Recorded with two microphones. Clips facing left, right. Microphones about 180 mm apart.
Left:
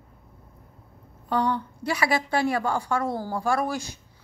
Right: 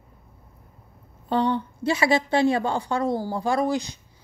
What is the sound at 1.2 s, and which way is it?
A woman's voice, 25° right (ahead or behind).